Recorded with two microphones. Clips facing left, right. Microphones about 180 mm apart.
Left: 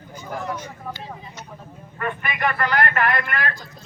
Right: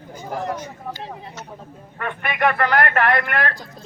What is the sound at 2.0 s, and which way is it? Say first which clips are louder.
Speech: right 3 dB; 60° right (ahead or behind).